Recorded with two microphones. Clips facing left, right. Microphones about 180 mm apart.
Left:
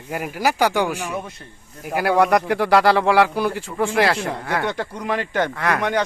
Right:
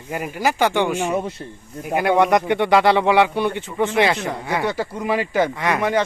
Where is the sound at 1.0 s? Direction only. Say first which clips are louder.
Right 6 dB; 30° right (ahead or behind).